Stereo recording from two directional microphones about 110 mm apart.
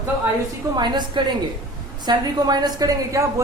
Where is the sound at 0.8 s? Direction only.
45° right (ahead or behind).